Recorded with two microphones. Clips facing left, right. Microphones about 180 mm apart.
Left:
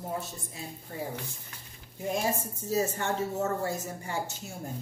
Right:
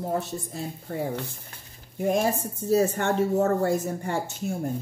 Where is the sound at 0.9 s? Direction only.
55° right (ahead or behind).